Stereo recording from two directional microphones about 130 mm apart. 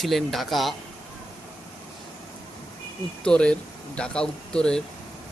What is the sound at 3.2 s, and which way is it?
Speech, 10° left (ahead or behind).